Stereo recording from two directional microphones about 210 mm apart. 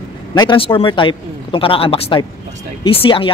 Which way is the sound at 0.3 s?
25° left (ahead or behind).